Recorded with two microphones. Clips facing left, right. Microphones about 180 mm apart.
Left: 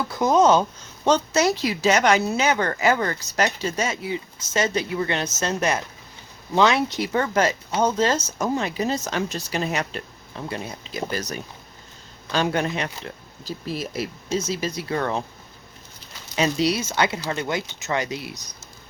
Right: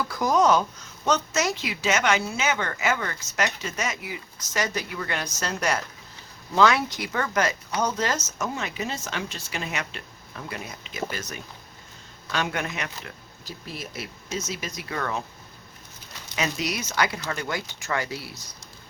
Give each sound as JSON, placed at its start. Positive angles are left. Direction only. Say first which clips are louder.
{"t": 0.0, "sound": "a sound", "louder": "left 4 dB", "side_deg": 25}
{"t": 1.0, "sound": "a woman's voice", "louder": "left 5 dB", "side_deg": 30}
{"t": 16.3, "sound": "speech", "louder": "left 7 dB", "side_deg": 30}